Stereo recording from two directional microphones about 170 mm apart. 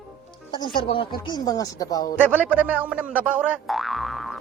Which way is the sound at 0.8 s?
30° left (ahead or behind).